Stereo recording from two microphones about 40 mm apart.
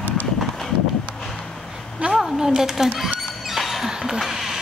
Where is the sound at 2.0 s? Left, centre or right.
Right.